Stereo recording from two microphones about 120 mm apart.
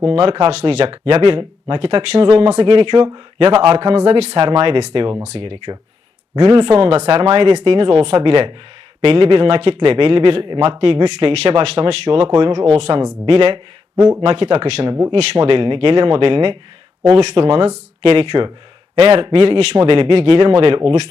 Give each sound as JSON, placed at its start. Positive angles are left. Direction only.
{"t": 0.0, "sound": "a man's voice", "side_deg": -50}
{"t": 2.6, "sound": "a man's voice", "side_deg": -45}
{"t": 3.9, "sound": "speech", "side_deg": -60}
{"t": 4.4, "sound": "a man's voice", "side_deg": -40}
{"t": 7.1, "sound": "a man's voice", "side_deg": -45}
{"t": 13.9, "sound": "speech", "side_deg": -25}
{"t": 14.2, "sound": "a man's voice", "side_deg": -55}